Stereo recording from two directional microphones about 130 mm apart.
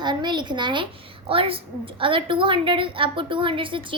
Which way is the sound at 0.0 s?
35° right (ahead or behind).